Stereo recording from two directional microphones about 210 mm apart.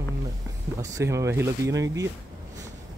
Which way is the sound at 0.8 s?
15° right (ahead or behind).